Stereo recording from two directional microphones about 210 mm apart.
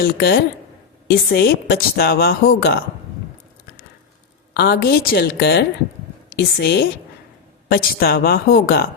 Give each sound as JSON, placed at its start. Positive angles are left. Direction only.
{"t": 0.0, "sound": "speech", "side_deg": 50}
{"t": 4.5, "sound": "speech", "side_deg": 50}